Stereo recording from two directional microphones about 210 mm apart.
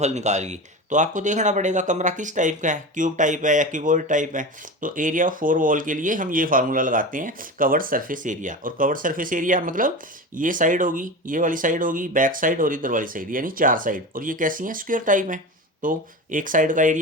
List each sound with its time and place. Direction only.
0.0 s speech: 35° right (ahead or behind)